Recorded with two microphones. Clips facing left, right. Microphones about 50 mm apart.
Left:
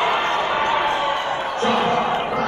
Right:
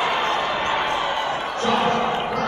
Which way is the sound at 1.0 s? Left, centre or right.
Left.